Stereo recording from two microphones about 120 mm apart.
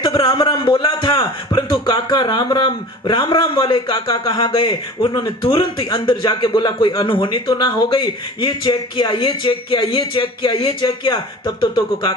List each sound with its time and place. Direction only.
0.0 s a man's voice: 40° left (ahead or behind)